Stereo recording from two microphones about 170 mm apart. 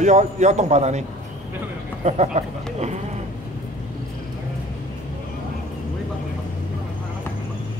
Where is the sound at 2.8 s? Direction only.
40° right (ahead or behind).